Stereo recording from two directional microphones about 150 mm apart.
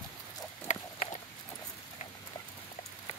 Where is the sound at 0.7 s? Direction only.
50° left (ahead or behind).